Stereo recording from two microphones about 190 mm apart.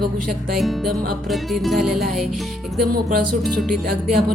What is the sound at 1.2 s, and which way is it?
Speech, centre (ahead or behind).